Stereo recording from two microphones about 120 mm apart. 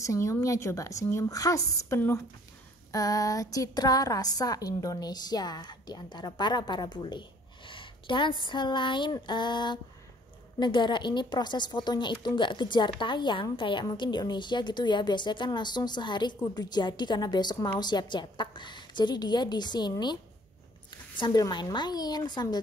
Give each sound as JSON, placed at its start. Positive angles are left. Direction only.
{"t": 0.0, "sound": "a woman's voice", "side_deg": 25}